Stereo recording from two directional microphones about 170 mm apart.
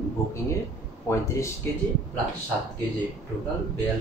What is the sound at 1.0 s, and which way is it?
Speech, 15° left (ahead or behind).